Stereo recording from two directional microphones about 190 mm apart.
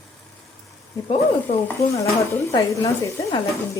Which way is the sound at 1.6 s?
15° left (ahead or behind).